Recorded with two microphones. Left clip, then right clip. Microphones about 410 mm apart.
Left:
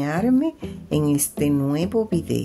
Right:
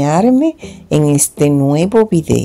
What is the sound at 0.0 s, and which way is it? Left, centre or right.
A woman's voice, left.